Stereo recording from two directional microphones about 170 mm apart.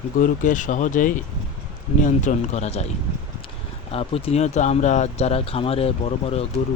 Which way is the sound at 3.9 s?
35° left (ahead or behind).